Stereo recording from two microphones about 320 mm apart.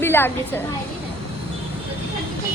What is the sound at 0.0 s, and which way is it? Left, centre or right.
Speech, centre.